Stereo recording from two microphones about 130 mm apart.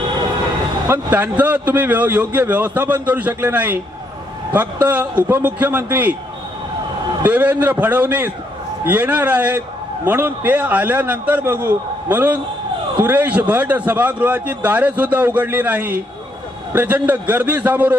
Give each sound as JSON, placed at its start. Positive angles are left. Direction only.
{"t": 0.8, "sound": "a man's voice", "side_deg": -15}
{"t": 7.2, "sound": "a man's voice", "side_deg": -15}